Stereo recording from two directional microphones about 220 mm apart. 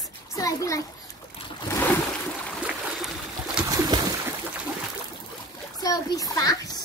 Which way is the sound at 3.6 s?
20° right (ahead or behind).